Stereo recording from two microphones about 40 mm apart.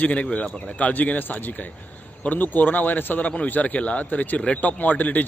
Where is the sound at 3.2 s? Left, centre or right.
Left.